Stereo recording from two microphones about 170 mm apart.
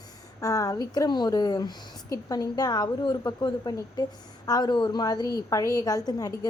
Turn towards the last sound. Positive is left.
turn(degrees=20)  # may be behind; listen again after turning